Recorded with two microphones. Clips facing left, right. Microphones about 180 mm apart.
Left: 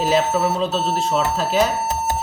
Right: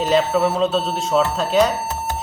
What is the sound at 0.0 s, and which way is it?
Speech, 5° left (ahead or behind).